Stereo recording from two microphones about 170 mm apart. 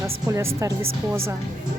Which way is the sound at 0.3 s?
20° right (ahead or behind).